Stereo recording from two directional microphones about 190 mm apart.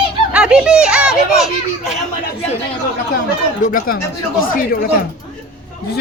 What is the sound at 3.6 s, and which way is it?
Speech, 45° left (ahead or behind).